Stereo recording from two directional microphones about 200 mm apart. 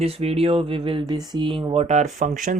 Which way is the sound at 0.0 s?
30° right (ahead or behind).